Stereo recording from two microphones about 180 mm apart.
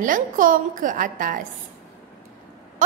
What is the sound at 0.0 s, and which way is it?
A woman's voice, 50° right (ahead or behind).